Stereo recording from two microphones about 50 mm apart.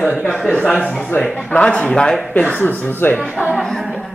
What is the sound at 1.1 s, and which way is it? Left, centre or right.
A man's voice, left.